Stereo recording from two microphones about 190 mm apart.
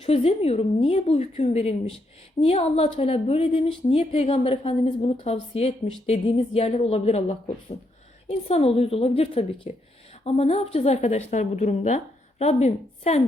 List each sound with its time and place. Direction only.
0.0 s a woman's voice: 30° left (ahead or behind)